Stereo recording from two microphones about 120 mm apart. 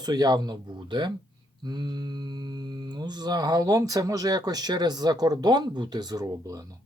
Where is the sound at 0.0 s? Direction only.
35° right (ahead or behind).